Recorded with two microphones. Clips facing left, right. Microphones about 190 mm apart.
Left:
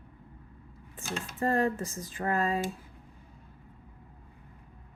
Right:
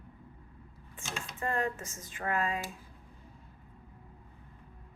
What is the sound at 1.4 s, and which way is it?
Speech, 35° left (ahead or behind).